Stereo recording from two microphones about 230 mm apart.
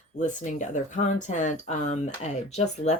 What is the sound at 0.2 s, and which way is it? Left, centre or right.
Speech, left.